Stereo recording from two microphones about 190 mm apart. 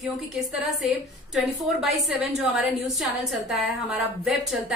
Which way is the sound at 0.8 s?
Centre (ahead or behind).